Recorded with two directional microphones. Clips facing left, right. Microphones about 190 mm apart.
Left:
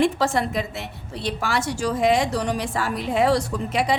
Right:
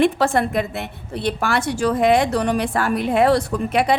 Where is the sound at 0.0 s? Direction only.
55° right (ahead or behind).